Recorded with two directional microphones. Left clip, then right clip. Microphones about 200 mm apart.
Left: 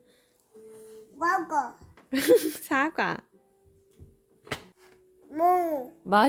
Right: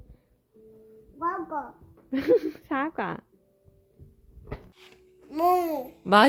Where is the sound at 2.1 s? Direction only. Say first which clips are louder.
Left 2 dB; 15° left (ahead or behind).